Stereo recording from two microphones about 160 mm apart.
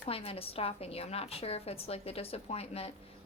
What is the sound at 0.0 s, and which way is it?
A woman's voice, 35° left (ahead or behind).